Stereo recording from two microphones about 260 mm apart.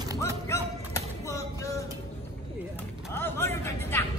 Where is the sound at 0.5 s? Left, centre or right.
Centre.